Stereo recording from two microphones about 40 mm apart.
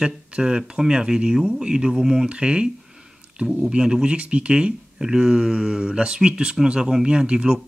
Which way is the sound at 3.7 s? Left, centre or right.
Right.